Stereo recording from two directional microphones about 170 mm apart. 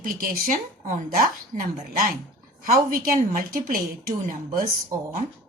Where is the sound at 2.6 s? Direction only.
55° right (ahead or behind).